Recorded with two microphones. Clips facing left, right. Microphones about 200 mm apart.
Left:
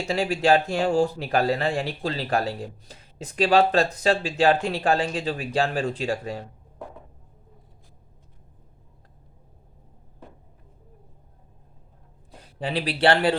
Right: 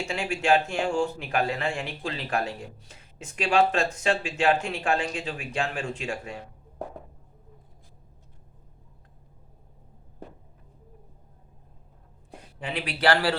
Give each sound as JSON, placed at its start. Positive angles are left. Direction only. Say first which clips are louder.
{"t": 0.0, "sound": "speech", "louder": "left 5 dB", "side_deg": 40}
{"t": 12.5, "sound": "speech", "louder": "left 5 dB", "side_deg": 35}